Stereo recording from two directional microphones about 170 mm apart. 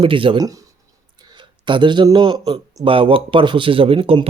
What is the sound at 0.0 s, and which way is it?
Speech, 30° right (ahead or behind).